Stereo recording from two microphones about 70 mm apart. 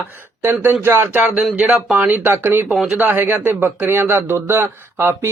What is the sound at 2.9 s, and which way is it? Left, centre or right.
A man's voice, right.